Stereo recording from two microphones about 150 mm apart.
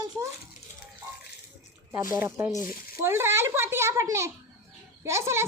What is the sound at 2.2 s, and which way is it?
A woman's voice, 20° right (ahead or behind).